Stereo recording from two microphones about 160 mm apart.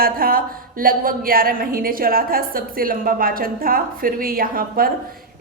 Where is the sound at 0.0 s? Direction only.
65° right (ahead or behind).